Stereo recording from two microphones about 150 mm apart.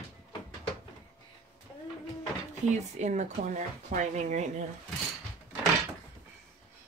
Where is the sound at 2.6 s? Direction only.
50° right (ahead or behind).